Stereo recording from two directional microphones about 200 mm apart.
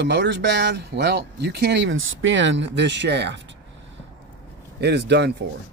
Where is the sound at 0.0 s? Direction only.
60° right (ahead or behind).